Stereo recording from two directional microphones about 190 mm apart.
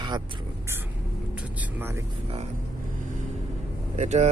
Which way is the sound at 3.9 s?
35° right (ahead or behind).